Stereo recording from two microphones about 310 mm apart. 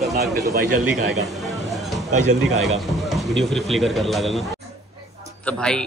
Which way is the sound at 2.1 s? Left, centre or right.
Right.